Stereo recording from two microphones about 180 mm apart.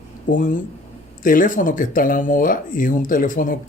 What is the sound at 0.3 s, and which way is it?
Speech, 45° left (ahead or behind).